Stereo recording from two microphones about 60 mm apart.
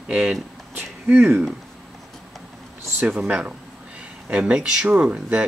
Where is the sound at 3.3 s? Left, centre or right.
Right.